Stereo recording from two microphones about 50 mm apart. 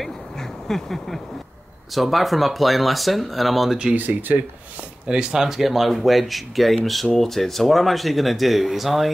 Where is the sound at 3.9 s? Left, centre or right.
Right.